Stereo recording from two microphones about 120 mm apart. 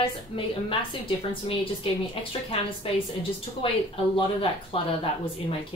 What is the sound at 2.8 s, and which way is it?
A woman's voice, 50° left (ahead or behind).